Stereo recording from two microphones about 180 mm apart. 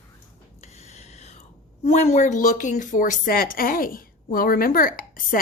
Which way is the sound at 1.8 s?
40° left (ahead or behind).